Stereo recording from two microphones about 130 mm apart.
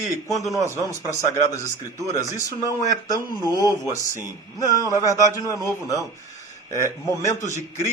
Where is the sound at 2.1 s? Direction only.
25° left (ahead or behind).